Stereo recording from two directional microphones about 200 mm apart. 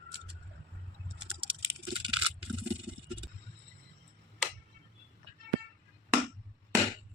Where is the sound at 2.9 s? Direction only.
5° right (ahead or behind).